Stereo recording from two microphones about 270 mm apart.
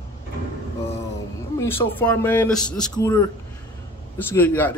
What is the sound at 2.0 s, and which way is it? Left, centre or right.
Speech, centre.